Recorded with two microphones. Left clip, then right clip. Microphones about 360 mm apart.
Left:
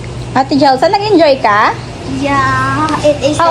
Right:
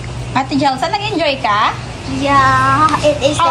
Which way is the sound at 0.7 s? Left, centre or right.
Left.